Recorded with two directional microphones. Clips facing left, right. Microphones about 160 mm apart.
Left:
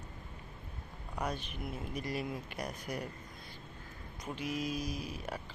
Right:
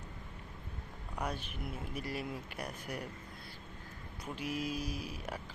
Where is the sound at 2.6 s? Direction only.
10° left (ahead or behind).